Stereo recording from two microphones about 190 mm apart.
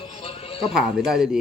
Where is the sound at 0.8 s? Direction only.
Centre (ahead or behind).